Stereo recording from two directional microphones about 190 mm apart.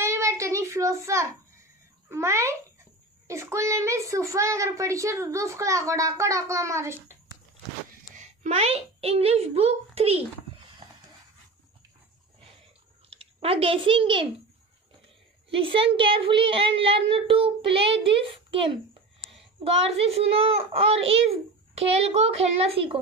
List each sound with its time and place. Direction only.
0.0 s child singing: 15° right (ahead or behind)
2.0 s a child's voice: 15° right (ahead or behind)
8.2 s a child's voice: 35° right (ahead or behind)
13.1 s a child's voice: 30° right (ahead or behind)
15.5 s a child's voice: 30° right (ahead or behind)